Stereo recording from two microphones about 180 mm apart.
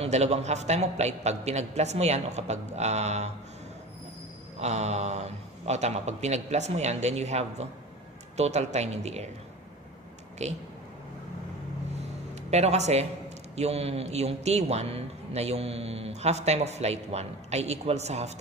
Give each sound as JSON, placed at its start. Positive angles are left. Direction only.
{"t": 0.0, "sound": "a man's voice", "side_deg": -35}
{"t": 4.6, "sound": "a man's voice", "side_deg": -40}
{"t": 10.4, "sound": "a man's voice", "side_deg": -40}
{"t": 12.4, "sound": "a man's voice", "side_deg": -35}